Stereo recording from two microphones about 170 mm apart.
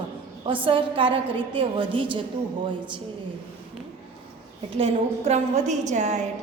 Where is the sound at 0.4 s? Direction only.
30° right (ahead or behind).